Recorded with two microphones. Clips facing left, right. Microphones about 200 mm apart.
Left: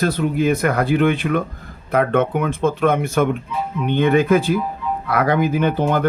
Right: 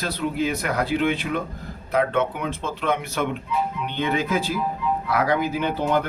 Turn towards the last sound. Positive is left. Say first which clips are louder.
# left 5 dB
turn(degrees=50)  # may be behind; listen again after turning